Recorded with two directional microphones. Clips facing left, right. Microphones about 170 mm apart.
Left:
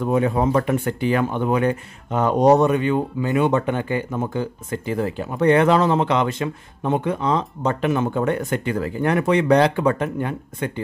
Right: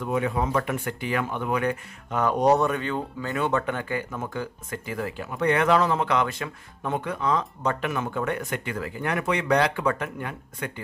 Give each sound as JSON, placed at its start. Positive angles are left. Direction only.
{"t": 0.0, "sound": "speech", "side_deg": 35}